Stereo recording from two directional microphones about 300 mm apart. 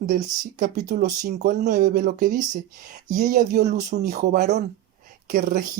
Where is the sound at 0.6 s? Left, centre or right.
Right.